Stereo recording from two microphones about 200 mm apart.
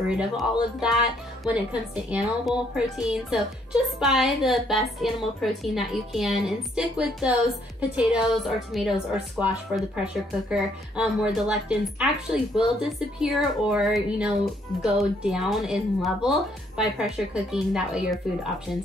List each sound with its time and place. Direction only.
0.1 s a woman's voice: 5° right (ahead or behind)